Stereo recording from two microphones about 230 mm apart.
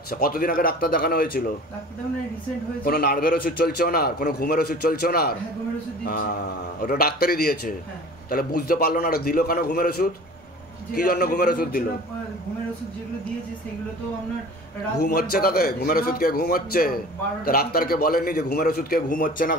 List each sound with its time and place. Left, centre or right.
0.1 s a man's voice: left
2.8 s a man's voice: left
6.8 s a man's voice: left
15.0 s a man's voice: left